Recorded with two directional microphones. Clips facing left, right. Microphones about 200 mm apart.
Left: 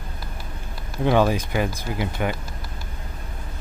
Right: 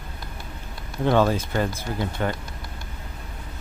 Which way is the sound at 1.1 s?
10° left (ahead or behind).